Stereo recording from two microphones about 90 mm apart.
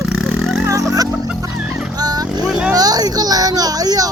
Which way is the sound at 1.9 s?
45° right (ahead or behind).